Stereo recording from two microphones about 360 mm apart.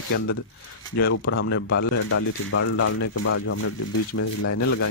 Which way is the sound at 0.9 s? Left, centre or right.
Left.